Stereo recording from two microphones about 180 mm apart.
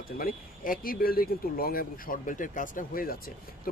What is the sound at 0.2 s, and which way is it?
Speech, 50° left (ahead or behind).